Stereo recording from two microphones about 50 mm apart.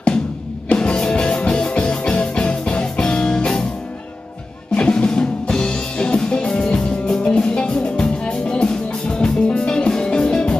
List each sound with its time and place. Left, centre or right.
0.7 s music: centre
4.7 s music: centre